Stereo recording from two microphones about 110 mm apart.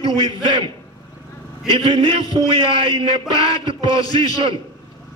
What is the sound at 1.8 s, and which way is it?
A man's voice, 50° right (ahead or behind).